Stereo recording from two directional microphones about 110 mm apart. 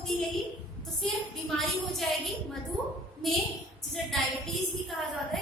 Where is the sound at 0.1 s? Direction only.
5° left (ahead or behind).